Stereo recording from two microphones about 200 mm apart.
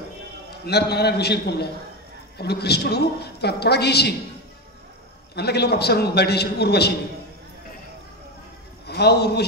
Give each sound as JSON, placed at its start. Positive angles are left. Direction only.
{"t": 0.7, "sound": "a woman's voice", "side_deg": 55}
{"t": 5.3, "sound": "a woman's voice", "side_deg": 55}
{"t": 8.8, "sound": "a man's voice", "side_deg": 55}